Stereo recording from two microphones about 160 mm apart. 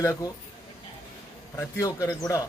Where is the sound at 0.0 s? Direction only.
20° left (ahead or behind).